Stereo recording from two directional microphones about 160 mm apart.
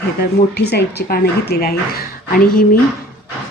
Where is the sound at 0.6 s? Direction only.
90° left.